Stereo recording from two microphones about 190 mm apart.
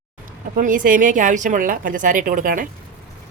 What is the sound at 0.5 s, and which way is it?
A woman's voice, 45° right (ahead or behind).